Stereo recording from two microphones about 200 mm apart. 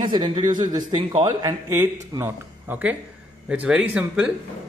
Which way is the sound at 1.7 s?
10° right (ahead or behind).